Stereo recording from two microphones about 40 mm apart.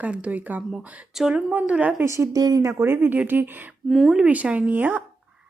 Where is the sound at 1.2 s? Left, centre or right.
Centre.